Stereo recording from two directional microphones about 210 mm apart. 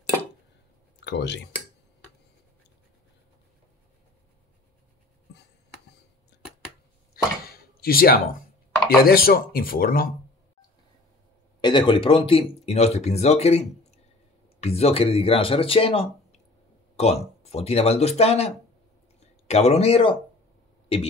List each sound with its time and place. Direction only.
1.0 s speech: 55° left (ahead or behind)
6.3 s scissors: 55° left (ahead or behind)
7.4 s a sound: 45° left (ahead or behind)
8.8 s speech: 45° left (ahead or behind)
11.6 s speech: 25° left (ahead or behind)